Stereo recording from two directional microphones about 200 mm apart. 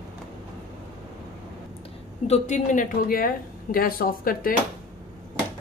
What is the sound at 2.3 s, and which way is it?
Speech, 35° left (ahead or behind).